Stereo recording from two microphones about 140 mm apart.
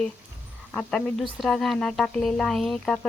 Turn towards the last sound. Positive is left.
turn(degrees=5)  # may be behind; listen again after turning